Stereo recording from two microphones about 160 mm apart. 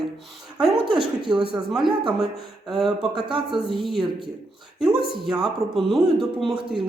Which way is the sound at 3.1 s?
30° right (ahead or behind).